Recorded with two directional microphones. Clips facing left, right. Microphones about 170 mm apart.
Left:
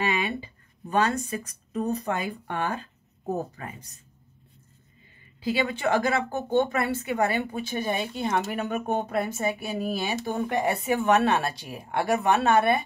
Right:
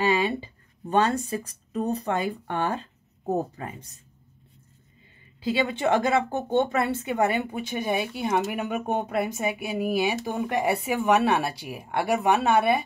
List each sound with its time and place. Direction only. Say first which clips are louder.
0.0 s speech: right 4 dB; 30° right (ahead or behind)
5.4 s speech: right 1 dB; 25° right (ahead or behind); by 12.8 s 10° right (ahead or behind)